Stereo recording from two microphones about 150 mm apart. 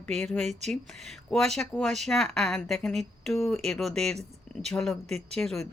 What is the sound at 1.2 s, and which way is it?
Speech, centre (ahead or behind).